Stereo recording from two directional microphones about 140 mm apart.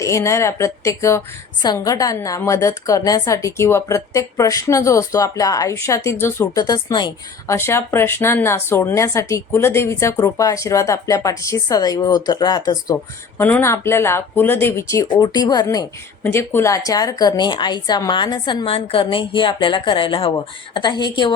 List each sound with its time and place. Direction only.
0.0 s a woman's voice: 20° left (ahead or behind)
13.4 s a woman's voice: 15° left (ahead or behind); by 21.3 s 30° left (ahead or behind)